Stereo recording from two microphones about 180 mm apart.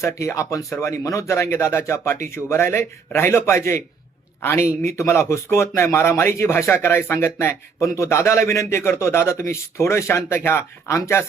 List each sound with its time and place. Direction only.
0.0 s speech: 15° left (ahead or behind)